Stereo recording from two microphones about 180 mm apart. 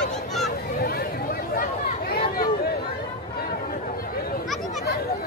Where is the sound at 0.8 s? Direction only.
60° left (ahead or behind).